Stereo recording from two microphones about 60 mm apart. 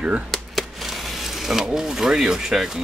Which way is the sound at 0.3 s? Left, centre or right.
Centre.